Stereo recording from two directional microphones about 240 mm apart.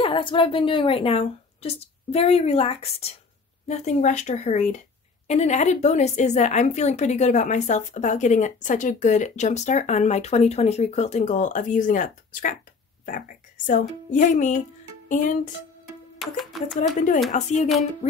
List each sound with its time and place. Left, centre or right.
0.0 s a woman's voice: left
15.0 s music: left
16.2 s speech: centre
17.3 s a woman's voice: left